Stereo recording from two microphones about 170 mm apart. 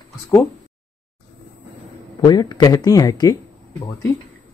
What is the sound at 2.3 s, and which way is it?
Speech, 25° left (ahead or behind).